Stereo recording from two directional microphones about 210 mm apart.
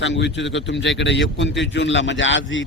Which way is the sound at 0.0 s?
60° left (ahead or behind).